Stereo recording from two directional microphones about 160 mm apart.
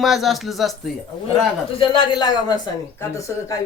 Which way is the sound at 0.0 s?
Centre (ahead or behind).